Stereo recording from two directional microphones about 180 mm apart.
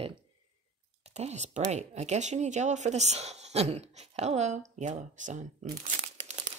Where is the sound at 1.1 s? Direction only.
40° right (ahead or behind).